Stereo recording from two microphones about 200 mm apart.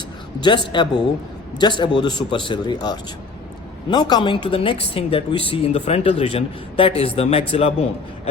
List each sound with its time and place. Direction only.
0.3 s speech: 25° left (ahead or behind)